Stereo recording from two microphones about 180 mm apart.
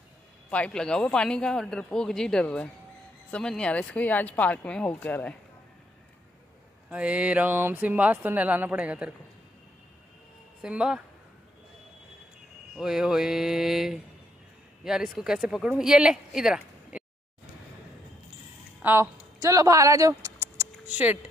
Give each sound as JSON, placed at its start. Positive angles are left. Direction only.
{"t": 0.5, "sound": "a man's voice", "side_deg": 5}
{"t": 6.9, "sound": "speech", "side_deg": -5}
{"t": 10.6, "sound": "a man's voice", "side_deg": -5}
{"t": 12.7, "sound": "a man's voice", "side_deg": 0}
{"t": 18.8, "sound": "speech", "side_deg": -10}
{"t": 20.7, "sound": "a sound", "side_deg": -10}